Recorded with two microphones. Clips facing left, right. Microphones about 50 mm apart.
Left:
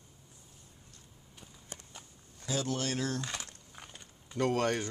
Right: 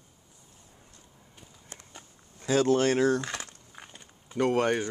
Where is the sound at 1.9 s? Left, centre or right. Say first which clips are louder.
Right 3 dB; right.